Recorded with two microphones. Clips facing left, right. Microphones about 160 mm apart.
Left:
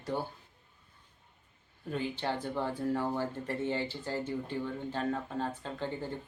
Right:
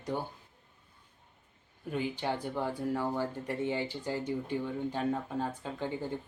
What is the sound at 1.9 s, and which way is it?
Speech, 15° right (ahead or behind).